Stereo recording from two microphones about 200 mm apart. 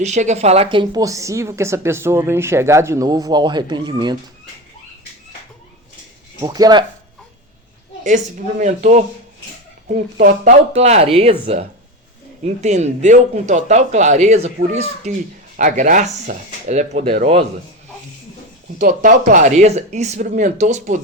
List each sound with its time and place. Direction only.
0.0 s a woman's voice: 35° right (ahead or behind)
6.4 s speech: 20° right (ahead or behind)
8.0 s speech: 35° right (ahead or behind)
10.2 s speech: 45° right (ahead or behind)
10.8 s speech: 30° right (ahead or behind)
12.6 s speech: 35° right (ahead or behind)
18.8 s speech: 40° right (ahead or behind)